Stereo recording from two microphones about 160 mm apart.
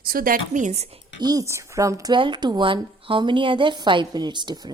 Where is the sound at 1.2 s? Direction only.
25° right (ahead or behind).